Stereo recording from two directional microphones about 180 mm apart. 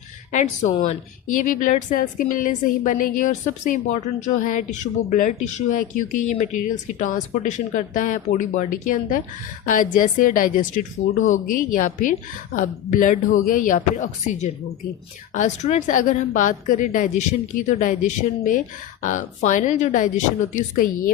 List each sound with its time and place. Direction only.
0.3 s a woman's voice: 40° left (ahead or behind)